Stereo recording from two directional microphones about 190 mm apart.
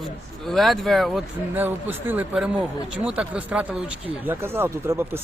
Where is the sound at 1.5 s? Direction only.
10° right (ahead or behind).